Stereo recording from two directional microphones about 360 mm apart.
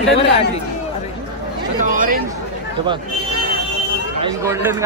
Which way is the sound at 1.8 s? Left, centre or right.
Right.